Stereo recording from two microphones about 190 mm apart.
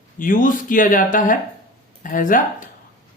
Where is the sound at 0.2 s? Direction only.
45° left (ahead or behind).